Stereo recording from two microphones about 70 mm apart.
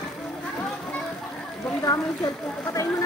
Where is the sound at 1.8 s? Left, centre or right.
Left.